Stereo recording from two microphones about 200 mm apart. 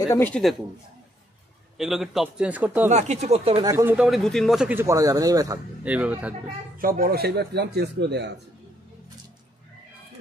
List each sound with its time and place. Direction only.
0.0 s a man's voice: 15° left (ahead or behind)
0.3 s a man's voice: centre (ahead or behind)
1.8 s a man's voice: centre (ahead or behind)
2.9 s speech: 35° right (ahead or behind)
3.6 s speech: 10° right (ahead or behind)
5.9 s speech: 5° right (ahead or behind)
6.8 s speech: 45° right (ahead or behind)